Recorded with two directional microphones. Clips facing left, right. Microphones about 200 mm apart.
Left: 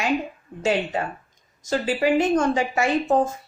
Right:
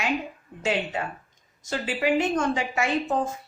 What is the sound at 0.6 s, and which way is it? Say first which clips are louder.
Speech: left 4 dB; 40° left (ahead or behind).